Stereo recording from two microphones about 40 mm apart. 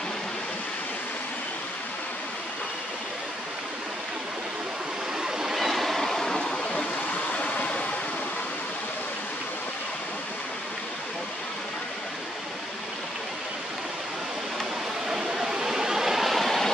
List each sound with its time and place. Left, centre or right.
5.2 s train: centre
7.3 s a sound: left
15.0 s vehicle: centre
16.3 s vehicle: centre